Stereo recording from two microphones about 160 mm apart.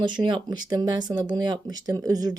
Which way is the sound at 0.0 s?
30° right (ahead or behind).